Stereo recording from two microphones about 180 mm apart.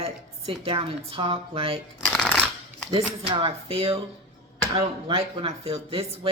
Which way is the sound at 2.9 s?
30° right (ahead or behind).